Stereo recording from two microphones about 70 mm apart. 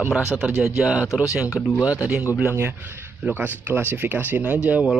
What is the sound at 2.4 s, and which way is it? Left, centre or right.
Speech, right.